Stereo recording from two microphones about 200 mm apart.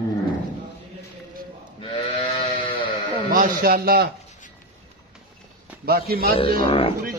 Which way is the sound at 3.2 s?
45° right (ahead or behind).